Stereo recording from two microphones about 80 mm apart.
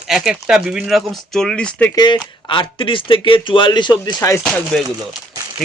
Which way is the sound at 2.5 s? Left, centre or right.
Left.